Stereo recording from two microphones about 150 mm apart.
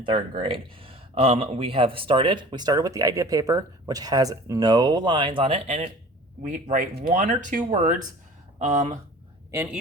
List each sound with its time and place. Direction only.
0.0 s speech: 35° right (ahead or behind)
6.4 s speech: 60° right (ahead or behind)